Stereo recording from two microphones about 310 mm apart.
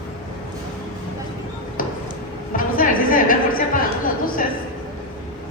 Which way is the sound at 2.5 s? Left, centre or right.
Left.